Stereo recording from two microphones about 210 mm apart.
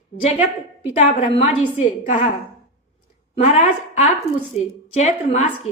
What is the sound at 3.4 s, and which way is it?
A woman's voice, 30° left (ahead or behind).